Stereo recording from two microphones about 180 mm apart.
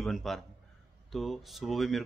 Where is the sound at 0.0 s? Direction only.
Centre (ahead or behind).